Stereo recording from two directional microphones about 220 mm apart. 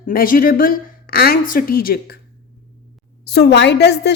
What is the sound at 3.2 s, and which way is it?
Speech, 50° left (ahead or behind).